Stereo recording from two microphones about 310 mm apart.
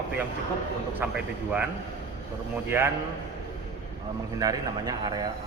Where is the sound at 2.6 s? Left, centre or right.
Centre.